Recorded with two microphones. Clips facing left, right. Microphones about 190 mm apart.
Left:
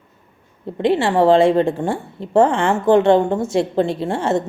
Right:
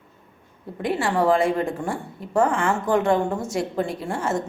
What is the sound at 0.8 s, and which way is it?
A woman's voice, 25° left (ahead or behind).